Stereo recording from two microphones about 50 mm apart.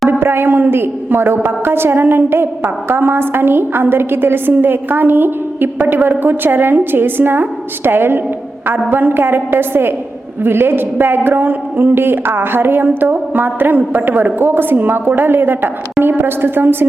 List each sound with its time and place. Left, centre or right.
0.1 s a man's voice: right